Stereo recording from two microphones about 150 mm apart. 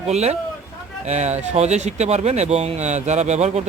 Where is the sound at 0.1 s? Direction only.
45° right (ahead or behind).